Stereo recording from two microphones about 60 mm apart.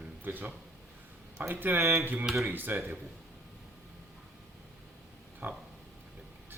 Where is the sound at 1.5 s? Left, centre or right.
Right.